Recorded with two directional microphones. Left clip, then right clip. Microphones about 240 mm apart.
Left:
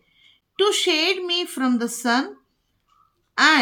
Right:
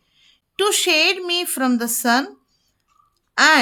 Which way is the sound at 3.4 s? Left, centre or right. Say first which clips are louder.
Right 2 dB; right.